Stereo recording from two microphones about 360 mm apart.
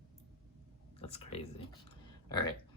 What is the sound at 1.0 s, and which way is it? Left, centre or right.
Speech, centre.